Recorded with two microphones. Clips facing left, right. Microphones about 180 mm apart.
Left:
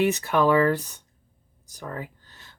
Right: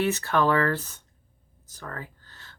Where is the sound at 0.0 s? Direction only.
15° left (ahead or behind).